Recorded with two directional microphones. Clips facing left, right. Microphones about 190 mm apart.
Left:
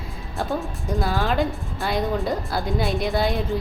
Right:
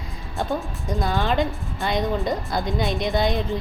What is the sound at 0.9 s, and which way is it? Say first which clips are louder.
Speech: even; centre (ahead or behind).